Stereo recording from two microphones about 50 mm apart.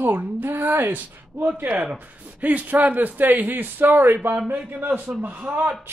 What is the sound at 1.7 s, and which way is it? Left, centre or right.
Speech, right.